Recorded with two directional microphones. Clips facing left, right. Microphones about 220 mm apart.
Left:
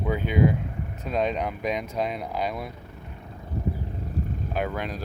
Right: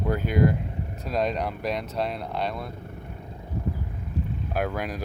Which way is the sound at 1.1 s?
5° left (ahead or behind).